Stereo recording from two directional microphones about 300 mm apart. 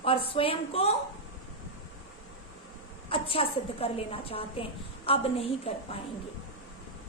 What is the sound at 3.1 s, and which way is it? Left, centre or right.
A woman's voice, centre.